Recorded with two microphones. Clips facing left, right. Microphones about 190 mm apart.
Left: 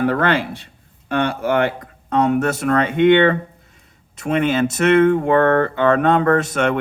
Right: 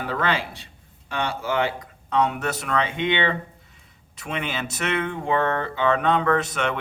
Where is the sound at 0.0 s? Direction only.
55° left (ahead or behind).